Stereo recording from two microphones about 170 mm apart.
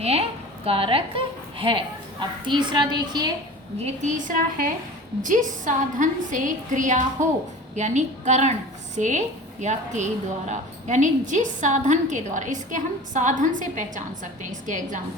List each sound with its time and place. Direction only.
0.0 s a woman's voice: 35° right (ahead or behind)
3.8 s a woman's voice: 50° right (ahead or behind)